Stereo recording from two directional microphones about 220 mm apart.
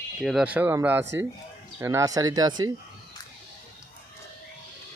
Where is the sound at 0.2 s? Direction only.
5° right (ahead or behind).